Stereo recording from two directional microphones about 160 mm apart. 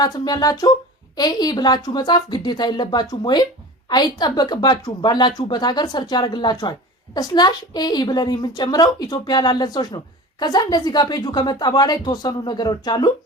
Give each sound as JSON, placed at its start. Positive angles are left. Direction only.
{"t": 0.0, "sound": "a woman's voice", "side_deg": 25}